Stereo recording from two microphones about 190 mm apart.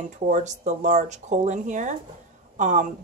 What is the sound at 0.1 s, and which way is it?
A woman's voice, 40° right (ahead or behind).